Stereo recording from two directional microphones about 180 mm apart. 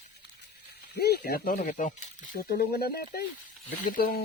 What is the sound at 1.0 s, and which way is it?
Speech, 55° left (ahead or behind).